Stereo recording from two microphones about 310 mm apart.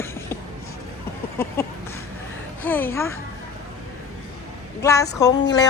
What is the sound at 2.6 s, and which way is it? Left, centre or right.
Speech, centre.